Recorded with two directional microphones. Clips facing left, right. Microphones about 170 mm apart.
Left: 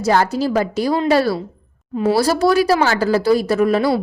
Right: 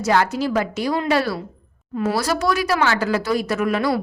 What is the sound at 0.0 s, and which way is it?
A woman's voice, 35° left (ahead or behind).